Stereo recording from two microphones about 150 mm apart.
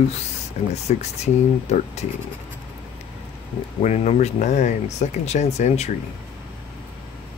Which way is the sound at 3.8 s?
45° left (ahead or behind).